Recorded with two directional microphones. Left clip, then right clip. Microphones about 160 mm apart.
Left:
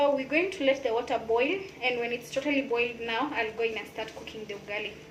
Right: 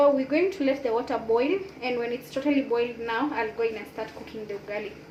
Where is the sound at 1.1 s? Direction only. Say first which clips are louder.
Right 3 dB; 70° right (ahead or behind).